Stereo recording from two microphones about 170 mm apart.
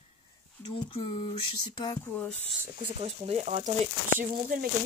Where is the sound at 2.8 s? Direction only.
35° right (ahead or behind).